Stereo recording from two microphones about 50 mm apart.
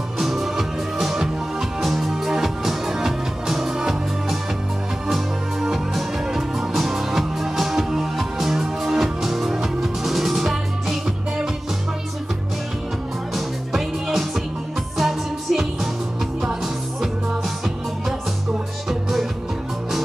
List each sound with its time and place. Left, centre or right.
0.2 s music: centre
13.3 s music: centre
18.9 s music: centre